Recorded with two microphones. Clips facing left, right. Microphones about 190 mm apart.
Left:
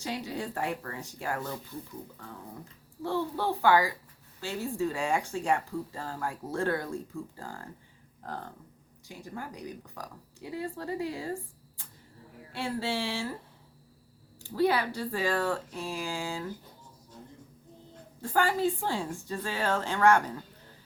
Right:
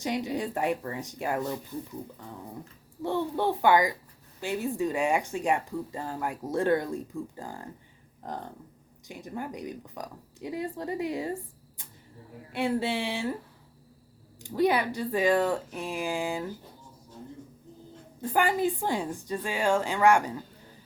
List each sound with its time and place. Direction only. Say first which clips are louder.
0.0 s speech: right 5 dB; 20° right (ahead or behind)
3.0 s speech: right 3 dB; 20° right (ahead or behind)
9.0 s speech: right 4 dB; 20° right (ahead or behind)
12.5 s speech: right 4 dB; 20° right (ahead or behind)
14.4 s speech: right 2 dB; 15° right (ahead or behind)
18.2 s speech: right 1 dB; 15° right (ahead or behind)